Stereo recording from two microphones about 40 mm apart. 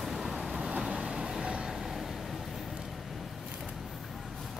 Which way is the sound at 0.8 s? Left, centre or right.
Centre.